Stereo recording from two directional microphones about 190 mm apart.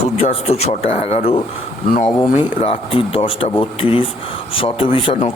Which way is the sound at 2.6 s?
30° left (ahead or behind).